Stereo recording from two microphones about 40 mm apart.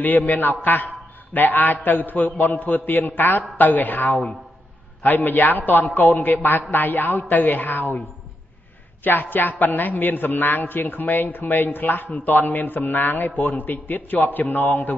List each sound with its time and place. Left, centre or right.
0.3 s a man's voice: left
9.0 s a man's voice: left